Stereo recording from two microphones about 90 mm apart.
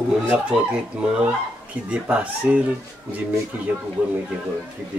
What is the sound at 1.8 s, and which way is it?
Speech, 15° right (ahead or behind).